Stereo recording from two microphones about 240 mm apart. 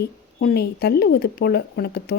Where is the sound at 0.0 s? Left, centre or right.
Left.